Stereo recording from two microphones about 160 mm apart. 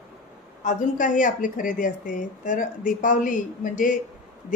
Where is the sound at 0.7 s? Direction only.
55° left (ahead or behind).